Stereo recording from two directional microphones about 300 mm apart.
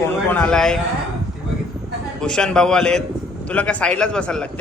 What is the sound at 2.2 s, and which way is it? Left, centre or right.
A man's voice, centre.